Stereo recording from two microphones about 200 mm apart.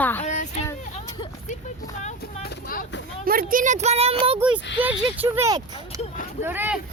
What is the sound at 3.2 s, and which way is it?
Speech, 45° right (ahead or behind).